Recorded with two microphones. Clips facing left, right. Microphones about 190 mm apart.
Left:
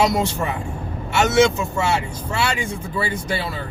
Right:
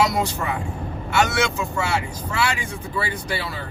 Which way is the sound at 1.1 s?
20° left (ahead or behind).